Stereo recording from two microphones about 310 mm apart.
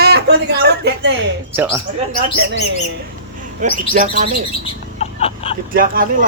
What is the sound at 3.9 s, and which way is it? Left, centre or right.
Speech, right.